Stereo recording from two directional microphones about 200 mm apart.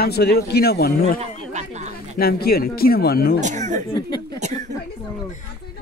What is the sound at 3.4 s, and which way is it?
Speech, 35° right (ahead or behind).